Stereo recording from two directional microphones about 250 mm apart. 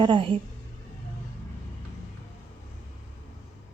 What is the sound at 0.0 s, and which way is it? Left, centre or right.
Speech, centre.